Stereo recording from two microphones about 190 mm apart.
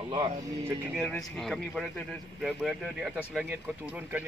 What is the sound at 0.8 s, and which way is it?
A man's voice, 5° left (ahead or behind).